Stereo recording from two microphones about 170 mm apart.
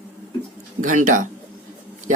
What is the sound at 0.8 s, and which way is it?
Speech, 50° right (ahead or behind).